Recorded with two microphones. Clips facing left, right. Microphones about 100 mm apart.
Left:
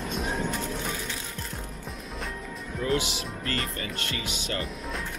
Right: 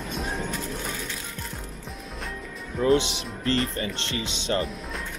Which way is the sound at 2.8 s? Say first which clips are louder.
Right 6 dB; 30° right (ahead or behind).